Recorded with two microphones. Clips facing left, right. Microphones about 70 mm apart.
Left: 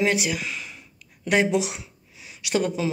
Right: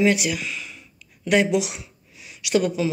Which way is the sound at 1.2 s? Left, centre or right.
Left.